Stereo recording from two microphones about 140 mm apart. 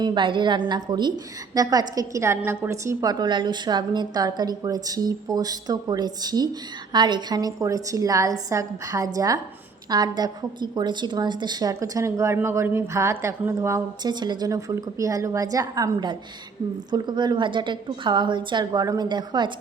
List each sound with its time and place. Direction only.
0.0 s a woman's voice: 35° right (ahead or behind)